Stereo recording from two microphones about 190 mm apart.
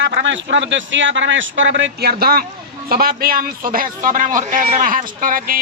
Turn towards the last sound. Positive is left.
turn(degrees=-45)  # may be behind; listen again after turning